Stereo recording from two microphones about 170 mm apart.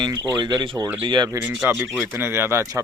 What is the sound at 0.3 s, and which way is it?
Speech, 25° right (ahead or behind).